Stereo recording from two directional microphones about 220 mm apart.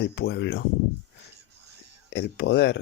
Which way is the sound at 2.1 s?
50° left (ahead or behind).